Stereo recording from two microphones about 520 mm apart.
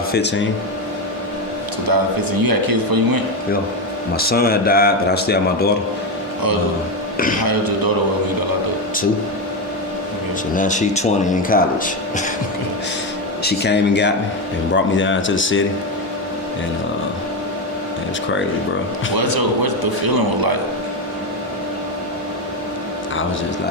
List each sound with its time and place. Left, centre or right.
0.1 s a man's voice: centre
2.4 s speech: right
4.2 s speech: centre
10.5 s speech: centre
13.4 s a man's voice: centre
19.1 s speech: right